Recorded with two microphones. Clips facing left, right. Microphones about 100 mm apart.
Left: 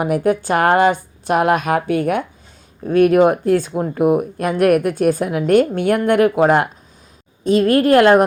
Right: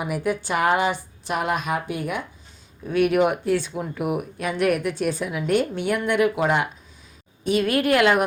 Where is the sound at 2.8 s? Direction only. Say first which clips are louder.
Left 7 dB; 40° left (ahead or behind).